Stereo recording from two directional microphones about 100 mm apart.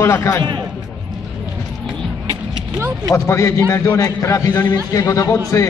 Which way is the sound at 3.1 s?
30° left (ahead or behind).